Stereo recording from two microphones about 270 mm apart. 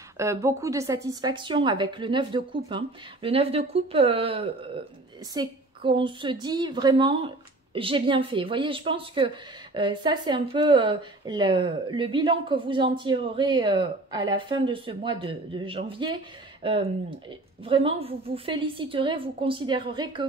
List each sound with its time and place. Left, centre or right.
0.2 s a woman's voice: centre